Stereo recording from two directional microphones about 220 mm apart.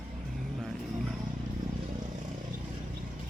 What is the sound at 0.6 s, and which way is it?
Roaring cats, centre (ahead or behind).